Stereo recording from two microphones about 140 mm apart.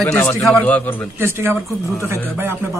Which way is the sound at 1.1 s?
15° right (ahead or behind).